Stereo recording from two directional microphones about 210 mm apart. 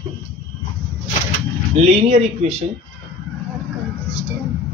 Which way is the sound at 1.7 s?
30° right (ahead or behind).